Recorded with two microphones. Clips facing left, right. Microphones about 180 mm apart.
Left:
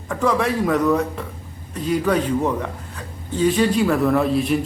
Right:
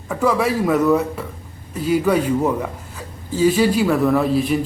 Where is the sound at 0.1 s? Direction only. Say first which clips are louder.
Right 2 dB; 5° right (ahead or behind).